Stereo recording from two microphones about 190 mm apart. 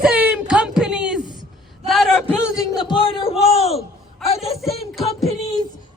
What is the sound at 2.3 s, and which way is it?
A man's voice, 15° left (ahead or behind).